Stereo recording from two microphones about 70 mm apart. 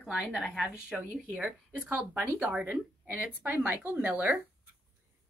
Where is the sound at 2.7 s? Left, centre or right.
Right.